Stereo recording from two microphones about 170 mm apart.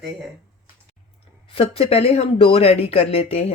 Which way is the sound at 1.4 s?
35° left (ahead or behind).